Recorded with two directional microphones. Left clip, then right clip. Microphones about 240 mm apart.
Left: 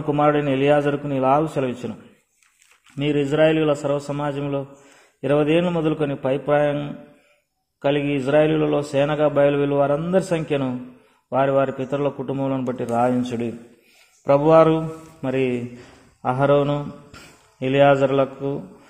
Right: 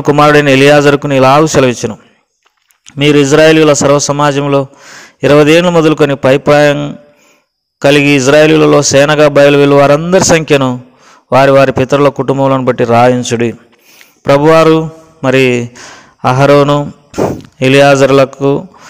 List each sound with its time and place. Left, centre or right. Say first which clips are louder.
0.1 s a man's voice: right 13 dB; right
3.0 s a man's voice: right 13 dB; right